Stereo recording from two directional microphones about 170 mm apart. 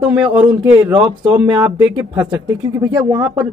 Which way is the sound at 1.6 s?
10° right (ahead or behind).